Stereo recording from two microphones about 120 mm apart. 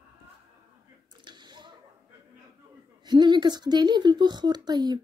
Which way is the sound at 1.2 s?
40° right (ahead or behind).